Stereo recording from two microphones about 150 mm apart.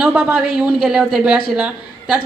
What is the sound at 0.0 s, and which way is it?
A woman's voice, 10° right (ahead or behind).